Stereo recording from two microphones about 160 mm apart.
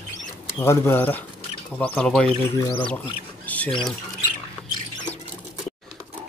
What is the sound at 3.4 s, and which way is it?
Squawk, 10° left (ahead or behind).